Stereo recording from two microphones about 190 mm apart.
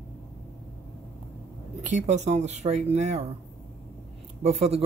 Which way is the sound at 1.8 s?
40° right (ahead or behind).